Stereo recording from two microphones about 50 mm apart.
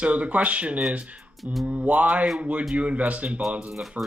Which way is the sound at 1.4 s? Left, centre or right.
Centre.